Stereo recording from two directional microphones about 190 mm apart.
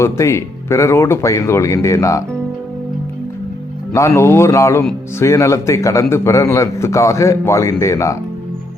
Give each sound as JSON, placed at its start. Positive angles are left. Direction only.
{"t": 0.0, "sound": "a man's voice", "side_deg": 15}
{"t": 3.9, "sound": "a man's voice", "side_deg": 15}